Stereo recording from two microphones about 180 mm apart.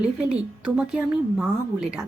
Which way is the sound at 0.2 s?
5° right (ahead or behind).